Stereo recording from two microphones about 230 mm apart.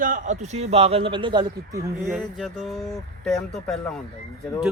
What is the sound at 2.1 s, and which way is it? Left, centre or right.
Speech, centre.